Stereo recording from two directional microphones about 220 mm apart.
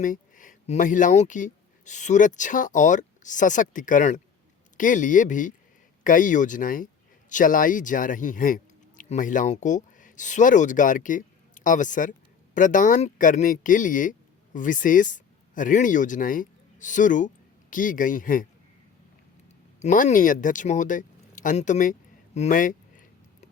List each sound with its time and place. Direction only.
0.0 s speech: 35° left (ahead or behind)
19.8 s speech: 35° left (ahead or behind)
22.4 s a sound: 35° left (ahead or behind)